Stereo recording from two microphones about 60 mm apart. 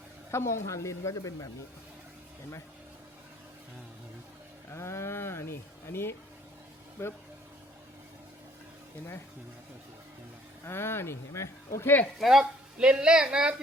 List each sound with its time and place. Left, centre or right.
0.3 s speech: left
4.7 s speech: left
10.7 s speech: left
12.2 s speech: centre
12.8 s a woman's voice: centre